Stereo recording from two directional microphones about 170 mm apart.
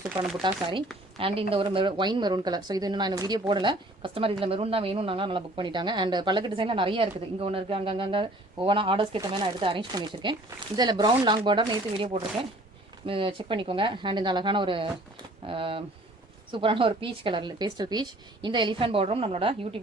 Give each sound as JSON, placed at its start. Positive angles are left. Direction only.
{"t": 0.4, "sound": "a woman's voice", "side_deg": -30}